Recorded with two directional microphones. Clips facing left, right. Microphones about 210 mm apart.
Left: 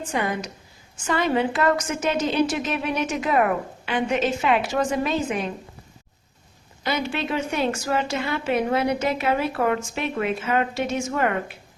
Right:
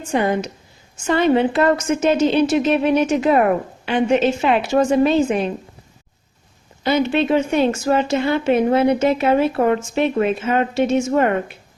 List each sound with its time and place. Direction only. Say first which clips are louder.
0.1 s a woman's voice: right 8 dB; 30° right (ahead or behind)
6.8 s a woman's voice: right 9 dB; 25° right (ahead or behind)